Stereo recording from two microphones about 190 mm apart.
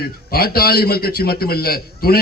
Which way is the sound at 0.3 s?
55° left (ahead or behind).